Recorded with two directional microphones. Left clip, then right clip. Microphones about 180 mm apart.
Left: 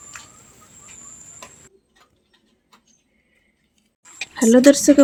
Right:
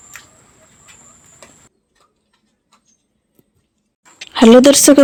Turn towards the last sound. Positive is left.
turn(degrees=-45)  # may be behind; listen again after turning